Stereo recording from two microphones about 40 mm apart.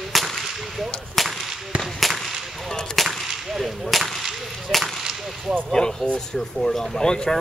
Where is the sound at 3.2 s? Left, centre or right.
Centre.